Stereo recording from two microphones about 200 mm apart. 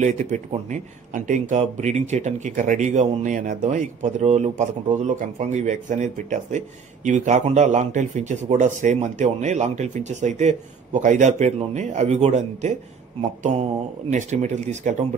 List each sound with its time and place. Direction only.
0.0 s speech: 35° right (ahead or behind)
14.1 s speech: 35° right (ahead or behind)